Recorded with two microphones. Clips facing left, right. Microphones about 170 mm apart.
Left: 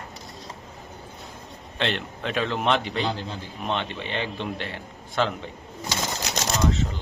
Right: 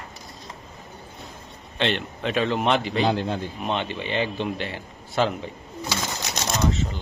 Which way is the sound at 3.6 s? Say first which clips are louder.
Even; 5° right (ahead or behind).